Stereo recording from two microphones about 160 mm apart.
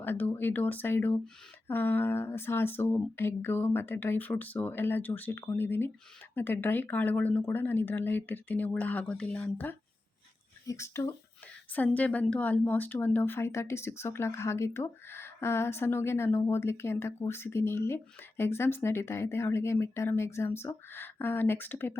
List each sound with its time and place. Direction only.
0.0 s a woman's voice: 15° left (ahead or behind)